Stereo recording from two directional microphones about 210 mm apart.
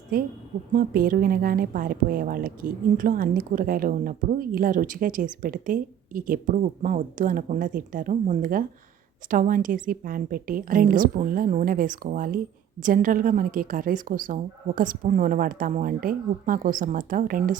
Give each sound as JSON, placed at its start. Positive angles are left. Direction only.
{"t": 0.1, "sound": "a woman's voice", "side_deg": -45}